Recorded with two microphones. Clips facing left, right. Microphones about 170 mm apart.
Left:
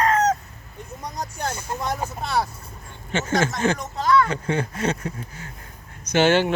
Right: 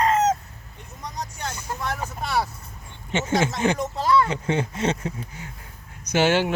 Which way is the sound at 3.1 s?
20° right (ahead or behind).